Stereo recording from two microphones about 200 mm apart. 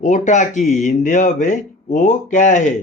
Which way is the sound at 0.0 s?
35° left (ahead or behind).